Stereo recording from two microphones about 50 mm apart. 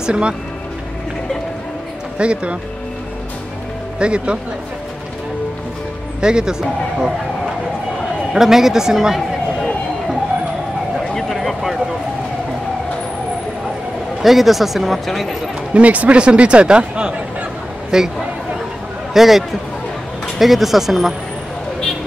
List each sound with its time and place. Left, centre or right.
0.0 s speech: centre
2.1 s speech: right
4.0 s speech: right
6.2 s a man's voice: centre
8.3 s a man's voice: centre
11.1 s a sound: centre
14.2 s speech: centre
15.7 s a man's voice: right; by 18.1 s centre
19.1 s speech: centre